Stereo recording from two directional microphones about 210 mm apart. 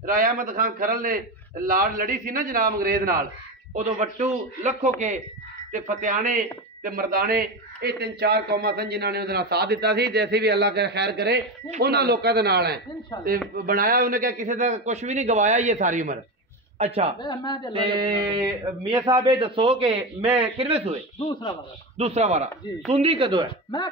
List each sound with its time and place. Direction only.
0.0 s a man's voice: 40° right (ahead or behind)
13.1 s speech: 20° left (ahead or behind)
13.7 s a man's voice: 45° right (ahead or behind)
17.2 s speech: 20° left (ahead or behind)
17.7 s speech: 20° right (ahead or behind)
21.2 s speech: 20° left (ahead or behind)
21.9 s speech: 30° right (ahead or behind)
23.7 s speech: 20° left (ahead or behind)